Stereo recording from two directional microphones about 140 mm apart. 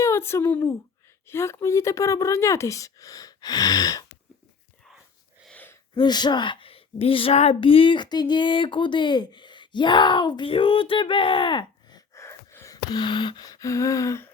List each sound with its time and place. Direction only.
0.0 s a woman's voice: 20° left (ahead or behind)
5.5 s gasp: 10° left (ahead or behind)
5.9 s a woman's voice: 30° left (ahead or behind)